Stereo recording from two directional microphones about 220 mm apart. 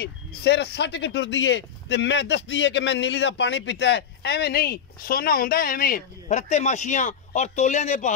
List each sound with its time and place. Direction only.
0.0 s speech: 50° left (ahead or behind); by 8.1 s 30° left (ahead or behind)